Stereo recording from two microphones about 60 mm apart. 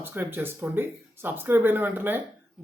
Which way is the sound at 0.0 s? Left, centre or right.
Right.